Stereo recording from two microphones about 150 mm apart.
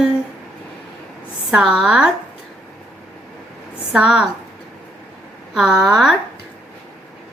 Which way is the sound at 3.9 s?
5° right (ahead or behind).